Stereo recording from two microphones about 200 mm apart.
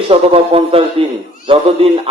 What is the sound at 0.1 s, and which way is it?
A man's voice, 30° right (ahead or behind).